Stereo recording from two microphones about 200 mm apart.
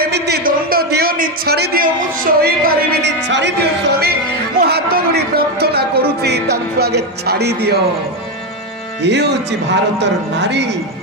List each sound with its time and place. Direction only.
0.0 s a man's voice: 55° right (ahead or behind)
4.0 s speech: 50° right (ahead or behind)
9.0 s speech: 60° right (ahead or behind)